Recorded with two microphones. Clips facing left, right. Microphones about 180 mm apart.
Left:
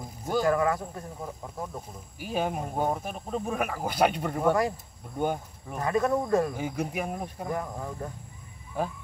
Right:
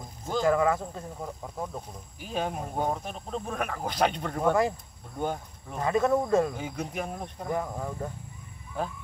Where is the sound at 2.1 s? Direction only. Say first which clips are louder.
Left 2 dB; 5° left (ahead or behind).